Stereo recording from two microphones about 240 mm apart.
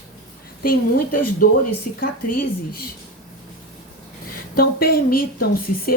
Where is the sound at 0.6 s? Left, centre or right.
Left.